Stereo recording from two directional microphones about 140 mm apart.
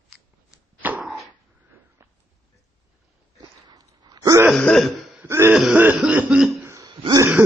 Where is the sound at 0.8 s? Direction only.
15° right (ahead or behind).